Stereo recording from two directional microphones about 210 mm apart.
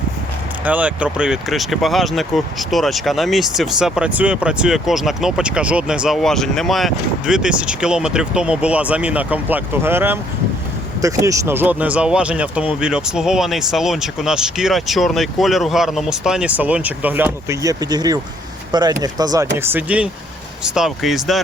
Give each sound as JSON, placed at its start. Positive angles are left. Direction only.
{"t": 0.6, "sound": "speech", "side_deg": -5}